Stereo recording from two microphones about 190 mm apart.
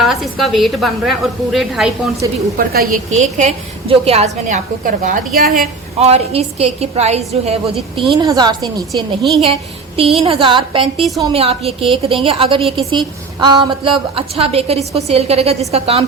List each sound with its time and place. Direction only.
0.0 s a woman's voice: centre (ahead or behind)
2.2 s a woman's voice: 20° right (ahead or behind)
3.1 s a woman's voice: 40° right (ahead or behind)
6.0 s a woman's voice: 35° right (ahead or behind)
8.1 s a woman's voice: 20° right (ahead or behind)
11.0 s a woman's voice: centre (ahead or behind)
11.3 s a woman's voice: 30° right (ahead or behind)